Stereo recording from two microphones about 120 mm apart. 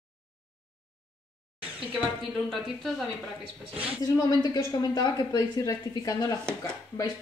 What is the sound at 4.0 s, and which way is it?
Speech, 35° left (ahead or behind).